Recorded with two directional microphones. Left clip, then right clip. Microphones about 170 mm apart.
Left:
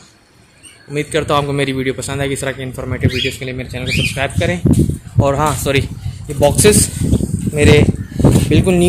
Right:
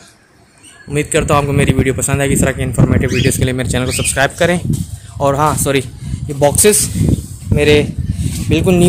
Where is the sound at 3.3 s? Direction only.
30° right (ahead or behind).